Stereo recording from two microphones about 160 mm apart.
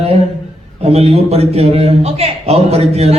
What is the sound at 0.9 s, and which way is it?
A man's voice, 40° right (ahead or behind).